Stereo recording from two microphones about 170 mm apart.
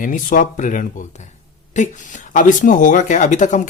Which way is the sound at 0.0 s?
50° left (ahead or behind).